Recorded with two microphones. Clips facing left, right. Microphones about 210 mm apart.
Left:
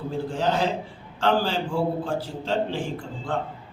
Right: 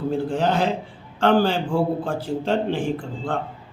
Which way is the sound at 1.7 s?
55° right (ahead or behind).